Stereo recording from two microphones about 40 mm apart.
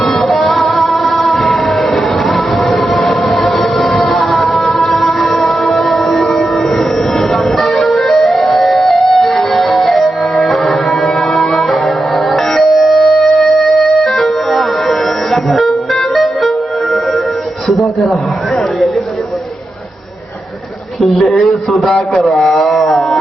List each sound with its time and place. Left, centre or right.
0.0 s music: centre
3.0 s train: centre
3.9 s music: centre
6.3 s train: centre
7.8 s music: centre
15.4 s music: centre
17.7 s a sound: centre
21.0 s a sound: centre